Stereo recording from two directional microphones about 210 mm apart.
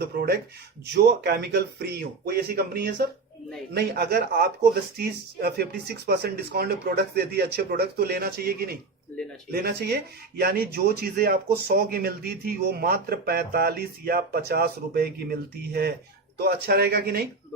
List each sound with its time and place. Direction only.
0.0 s speech: 50° right (ahead or behind)